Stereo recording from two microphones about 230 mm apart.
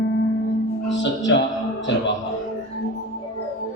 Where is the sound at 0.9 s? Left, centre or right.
Left.